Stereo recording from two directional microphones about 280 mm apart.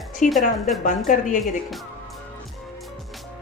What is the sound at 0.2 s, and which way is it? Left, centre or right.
A woman's voice, left.